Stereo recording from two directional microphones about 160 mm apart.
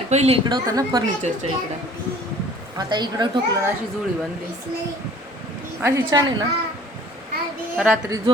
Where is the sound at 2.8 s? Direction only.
25° right (ahead or behind).